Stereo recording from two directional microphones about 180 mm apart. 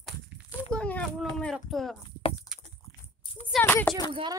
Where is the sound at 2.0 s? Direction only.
25° left (ahead or behind).